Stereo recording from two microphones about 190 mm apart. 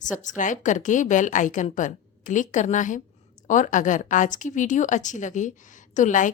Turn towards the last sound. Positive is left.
turn(degrees=40)  # may be behind; listen again after turning